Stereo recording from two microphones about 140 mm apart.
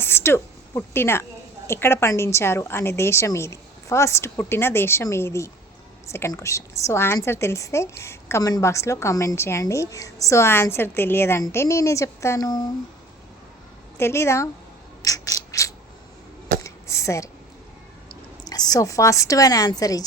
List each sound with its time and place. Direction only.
0.0 s a woman's voice: 15° left (ahead or behind)
14.0 s a woman's voice: 20° left (ahead or behind)
15.0 s mechanisms: 25° left (ahead or behind)
16.6 s a sound: 20° left (ahead or behind)
18.1 s a woman's voice: 30° left (ahead or behind)